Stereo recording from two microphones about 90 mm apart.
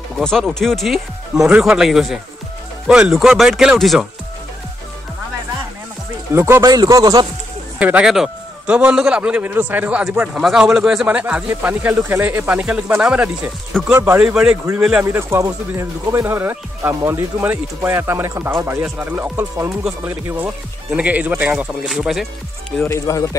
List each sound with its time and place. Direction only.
0.2 s speech: 5° left (ahead or behind)
6.3 s speech: 30° right (ahead or behind)
6.6 s speech: 45° right (ahead or behind)
7.8 s a man's voice: 15° right (ahead or behind)
13.9 s speech: 30° right (ahead or behind)
14.2 s a man's voice: 10° right (ahead or behind)
15.0 s a man's voice: 30° right (ahead or behind)
21.8 s speech: centre (ahead or behind)
22.8 s speech: 35° left (ahead or behind)